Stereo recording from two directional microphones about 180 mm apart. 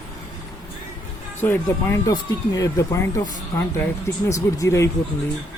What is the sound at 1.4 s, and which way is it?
Speech, 10° left (ahead or behind).